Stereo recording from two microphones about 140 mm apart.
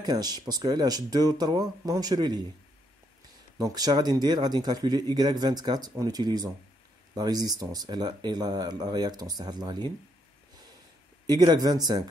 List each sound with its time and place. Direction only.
0.0 s speech: 30° right (ahead or behind)
3.5 s speech: 25° right (ahead or behind)
11.2 s speech: 30° right (ahead or behind)